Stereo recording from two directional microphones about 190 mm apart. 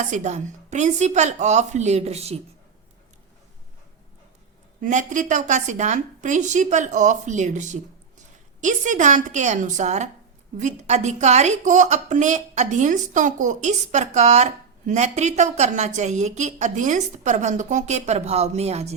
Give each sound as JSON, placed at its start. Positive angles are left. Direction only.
{"t": 0.0, "sound": "a woman's voice", "side_deg": -40}
{"t": 4.8, "sound": "a woman's voice", "side_deg": -40}